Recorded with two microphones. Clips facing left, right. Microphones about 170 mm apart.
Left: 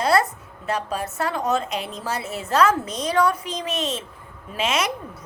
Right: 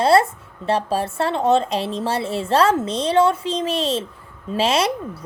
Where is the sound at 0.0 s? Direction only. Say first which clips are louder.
Right 5 dB; 30° right (ahead or behind).